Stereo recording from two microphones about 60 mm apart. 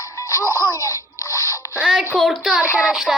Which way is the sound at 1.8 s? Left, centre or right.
Centre.